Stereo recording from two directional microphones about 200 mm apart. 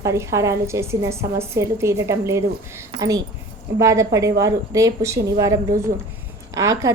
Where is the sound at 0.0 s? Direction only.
15° right (ahead or behind).